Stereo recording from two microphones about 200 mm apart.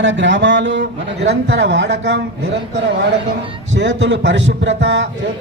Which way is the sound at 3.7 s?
65° right (ahead or behind).